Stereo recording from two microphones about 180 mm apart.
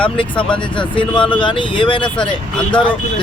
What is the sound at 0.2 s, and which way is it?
Speech, 25° left (ahead or behind).